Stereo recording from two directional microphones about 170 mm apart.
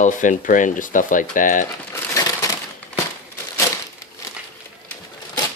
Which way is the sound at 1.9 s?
20° left (ahead or behind).